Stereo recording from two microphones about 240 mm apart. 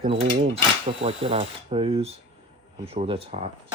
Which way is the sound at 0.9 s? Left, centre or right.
Right.